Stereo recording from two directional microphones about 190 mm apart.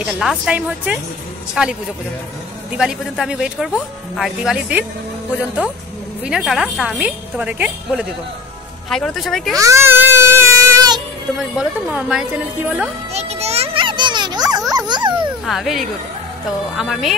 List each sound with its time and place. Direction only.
0.0 s speech: 5° right (ahead or behind)
2.8 s speech: 5° right (ahead or behind)
6.2 s speech: centre (ahead or behind)
9.6 s speech: 15° right (ahead or behind)
11.5 s speech: 5° right (ahead or behind)
13.1 s children playing: 35° right (ahead or behind)
14.7 s dog: 20° right (ahead or behind)
15.4 s speech: centre (ahead or behind)